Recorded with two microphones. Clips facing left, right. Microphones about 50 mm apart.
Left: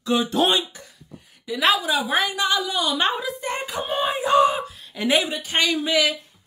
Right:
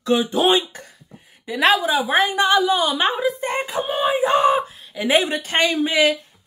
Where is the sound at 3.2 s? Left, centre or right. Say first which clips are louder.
Right 5 dB; right.